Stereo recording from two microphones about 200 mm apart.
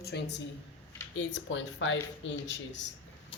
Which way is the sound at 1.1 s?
70° left (ahead or behind).